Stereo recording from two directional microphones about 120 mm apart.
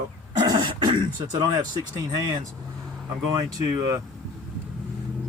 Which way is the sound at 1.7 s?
35° right (ahead or behind).